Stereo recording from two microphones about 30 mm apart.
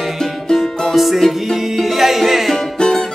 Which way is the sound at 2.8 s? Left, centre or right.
Left.